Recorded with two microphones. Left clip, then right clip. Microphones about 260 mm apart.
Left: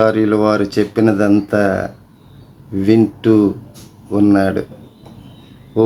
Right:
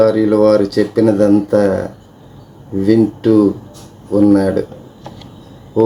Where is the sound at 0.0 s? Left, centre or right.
Left.